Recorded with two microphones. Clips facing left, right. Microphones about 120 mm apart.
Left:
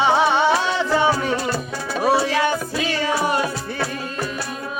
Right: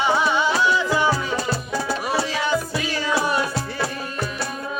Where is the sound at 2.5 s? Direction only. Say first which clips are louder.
Even; 65° left (ahead or behind).